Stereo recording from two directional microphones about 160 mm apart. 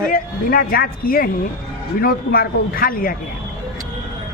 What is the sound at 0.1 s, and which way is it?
Speech, 65° left (ahead or behind).